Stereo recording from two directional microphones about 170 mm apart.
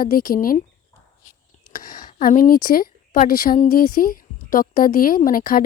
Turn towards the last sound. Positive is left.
turn(degrees=55)  # may be behind; listen again after turning